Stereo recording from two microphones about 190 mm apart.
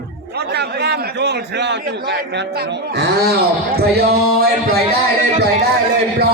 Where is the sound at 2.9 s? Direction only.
60° right (ahead or behind).